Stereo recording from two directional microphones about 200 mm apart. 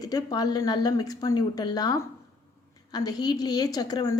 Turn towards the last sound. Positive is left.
turn(degrees=20)  # may be behind; listen again after turning